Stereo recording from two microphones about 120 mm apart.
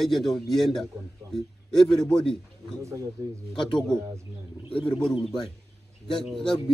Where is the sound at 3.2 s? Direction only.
25° right (ahead or behind).